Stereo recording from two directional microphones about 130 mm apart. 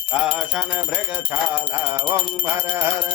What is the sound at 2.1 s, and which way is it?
Music, 25° right (ahead or behind).